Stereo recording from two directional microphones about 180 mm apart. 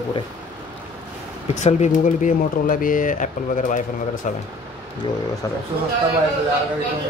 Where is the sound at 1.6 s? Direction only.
40° left (ahead or behind).